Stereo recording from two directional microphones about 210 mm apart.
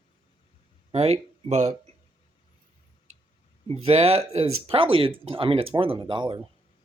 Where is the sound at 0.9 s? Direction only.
30° right (ahead or behind).